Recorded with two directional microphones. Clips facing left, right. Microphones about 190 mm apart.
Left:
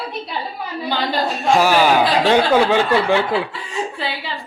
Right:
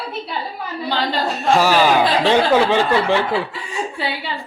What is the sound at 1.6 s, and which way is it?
Speech, 10° left (ahead or behind).